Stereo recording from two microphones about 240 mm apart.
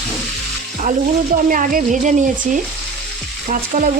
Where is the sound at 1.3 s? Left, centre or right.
Right.